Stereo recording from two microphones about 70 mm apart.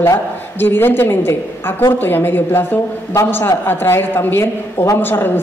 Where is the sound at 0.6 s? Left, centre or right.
Left.